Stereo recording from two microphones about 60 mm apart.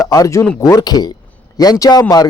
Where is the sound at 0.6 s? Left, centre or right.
Left.